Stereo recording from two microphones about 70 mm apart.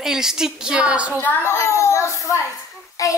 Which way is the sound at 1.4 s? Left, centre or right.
Left.